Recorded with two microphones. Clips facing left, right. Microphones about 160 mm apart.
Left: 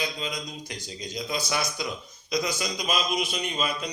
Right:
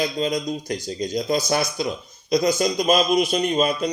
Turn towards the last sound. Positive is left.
turn(degrees=-45)  # may be behind; listen again after turning